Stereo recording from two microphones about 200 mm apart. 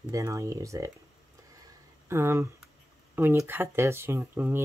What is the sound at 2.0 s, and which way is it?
Speech, 10° right (ahead or behind).